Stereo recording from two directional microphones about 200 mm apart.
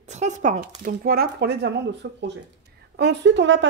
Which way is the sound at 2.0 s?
65° right (ahead or behind).